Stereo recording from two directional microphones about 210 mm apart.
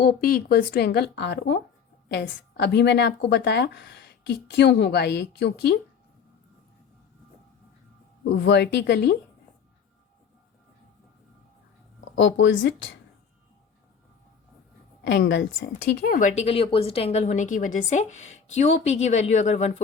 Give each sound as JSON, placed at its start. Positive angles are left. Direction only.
{"t": 0.0, "sound": "a woman's voice", "side_deg": 45}
{"t": 8.2, "sound": "a woman's voice", "side_deg": 55}
{"t": 12.1, "sound": "speech", "side_deg": 60}
{"t": 15.0, "sound": "a woman's voice", "side_deg": 55}